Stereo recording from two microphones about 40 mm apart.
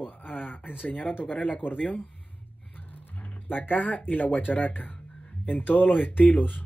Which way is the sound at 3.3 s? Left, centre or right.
Left.